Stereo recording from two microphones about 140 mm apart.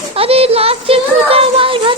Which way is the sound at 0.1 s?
45° right (ahead or behind).